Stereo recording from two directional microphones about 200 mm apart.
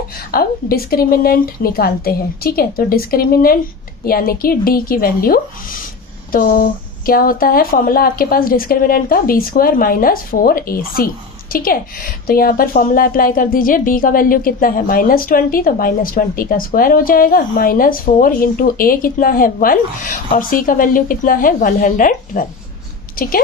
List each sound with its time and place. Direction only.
0.3 s a woman's voice: 50° left (ahead or behind)